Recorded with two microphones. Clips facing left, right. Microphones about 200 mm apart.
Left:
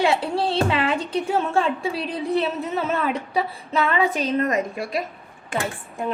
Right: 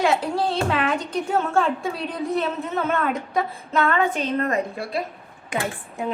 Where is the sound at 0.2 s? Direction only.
30° left (ahead or behind).